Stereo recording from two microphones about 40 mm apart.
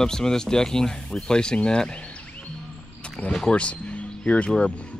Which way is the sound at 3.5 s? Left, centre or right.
Left.